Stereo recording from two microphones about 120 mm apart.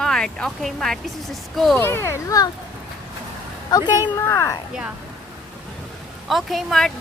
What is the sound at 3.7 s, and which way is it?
Speech, 35° left (ahead or behind).